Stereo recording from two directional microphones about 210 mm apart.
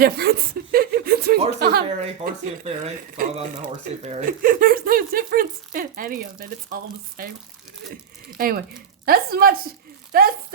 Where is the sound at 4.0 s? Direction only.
35° right (ahead or behind).